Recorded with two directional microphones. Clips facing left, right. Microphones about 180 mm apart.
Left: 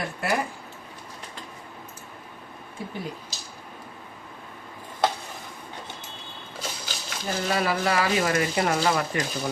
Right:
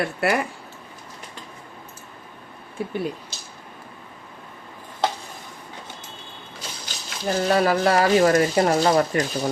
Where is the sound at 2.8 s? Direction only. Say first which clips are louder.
Right 7 dB; 65° right (ahead or behind).